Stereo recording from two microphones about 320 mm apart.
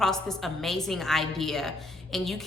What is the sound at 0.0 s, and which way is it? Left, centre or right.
Speech, centre.